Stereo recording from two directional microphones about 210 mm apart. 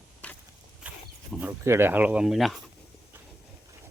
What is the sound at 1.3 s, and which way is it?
Speech, 5° right (ahead or behind).